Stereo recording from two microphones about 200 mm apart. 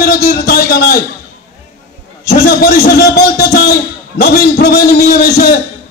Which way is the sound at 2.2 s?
55° left (ahead or behind).